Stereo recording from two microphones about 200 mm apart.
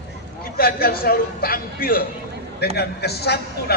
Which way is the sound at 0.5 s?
50° left (ahead or behind).